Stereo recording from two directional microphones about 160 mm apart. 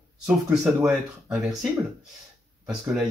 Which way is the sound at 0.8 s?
Centre (ahead or behind).